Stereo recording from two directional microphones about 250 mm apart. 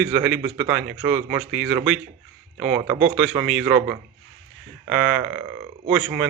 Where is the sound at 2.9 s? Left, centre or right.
Right.